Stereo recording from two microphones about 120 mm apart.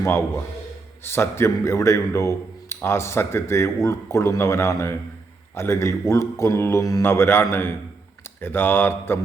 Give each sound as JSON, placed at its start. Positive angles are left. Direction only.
{"t": 0.0, "sound": "a man's voice", "side_deg": 20}